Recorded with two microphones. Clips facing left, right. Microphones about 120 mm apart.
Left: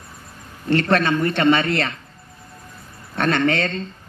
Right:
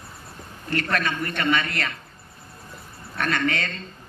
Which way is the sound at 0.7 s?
30° left (ahead or behind).